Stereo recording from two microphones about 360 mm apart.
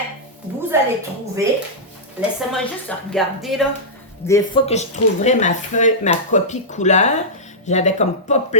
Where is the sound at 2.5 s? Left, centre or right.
Centre.